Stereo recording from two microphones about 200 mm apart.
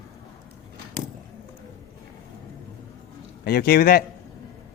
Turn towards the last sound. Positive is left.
turn(degrees=50)  # may be behind; listen again after turning